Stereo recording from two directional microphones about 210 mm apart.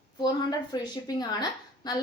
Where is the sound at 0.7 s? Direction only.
20° left (ahead or behind).